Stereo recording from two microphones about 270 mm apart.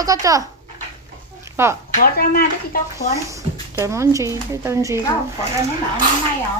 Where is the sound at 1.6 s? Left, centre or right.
Centre.